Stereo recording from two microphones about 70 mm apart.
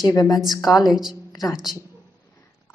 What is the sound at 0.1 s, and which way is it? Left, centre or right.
Speech, left.